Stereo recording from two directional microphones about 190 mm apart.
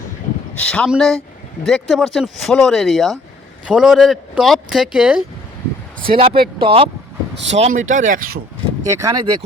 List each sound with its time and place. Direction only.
0.5 s speech: 5° left (ahead or behind)
6.0 s speech: 30° right (ahead or behind)
7.5 s speech: 35° right (ahead or behind)
8.8 s speech: 15° right (ahead or behind)